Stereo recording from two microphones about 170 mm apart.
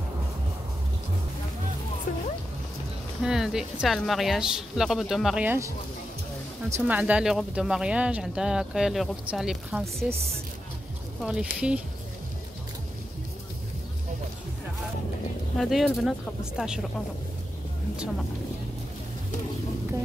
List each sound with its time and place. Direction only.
2.1 s music: 50° left (ahead or behind)
3.2 s speech: 5° right (ahead or behind)
6.7 s speech: 10° right (ahead or behind)
11.2 s speech: 5° right (ahead or behind)
15.5 s speech: centre (ahead or behind)